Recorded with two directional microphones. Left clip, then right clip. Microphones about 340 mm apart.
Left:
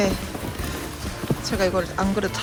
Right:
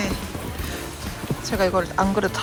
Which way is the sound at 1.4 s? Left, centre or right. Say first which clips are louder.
Right 2 dB; centre.